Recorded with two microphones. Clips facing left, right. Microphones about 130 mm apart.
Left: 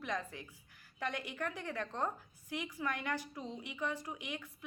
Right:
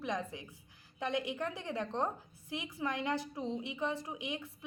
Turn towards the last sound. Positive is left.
turn(degrees=-20)  # may be behind; listen again after turning